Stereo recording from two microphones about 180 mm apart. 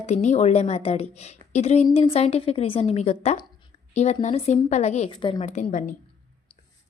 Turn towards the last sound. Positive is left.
turn(degrees=40)  # may be behind; listen again after turning